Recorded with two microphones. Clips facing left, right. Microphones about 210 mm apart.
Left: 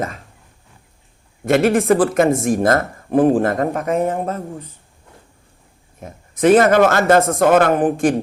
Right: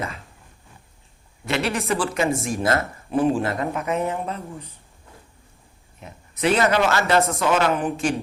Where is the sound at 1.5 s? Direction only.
50° left (ahead or behind).